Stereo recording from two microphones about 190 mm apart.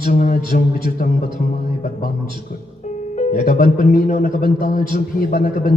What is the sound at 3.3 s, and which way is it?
A man's voice, 45° left (ahead or behind).